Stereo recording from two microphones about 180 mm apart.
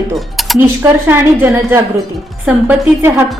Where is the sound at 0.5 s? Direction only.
15° right (ahead or behind).